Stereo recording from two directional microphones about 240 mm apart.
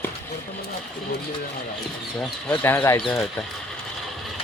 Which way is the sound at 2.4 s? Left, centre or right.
Centre.